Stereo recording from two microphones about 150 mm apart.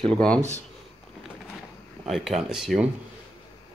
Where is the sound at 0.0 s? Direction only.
5° left (ahead or behind).